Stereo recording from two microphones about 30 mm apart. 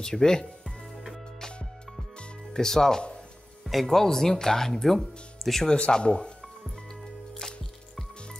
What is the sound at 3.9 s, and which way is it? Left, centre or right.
Speech, centre.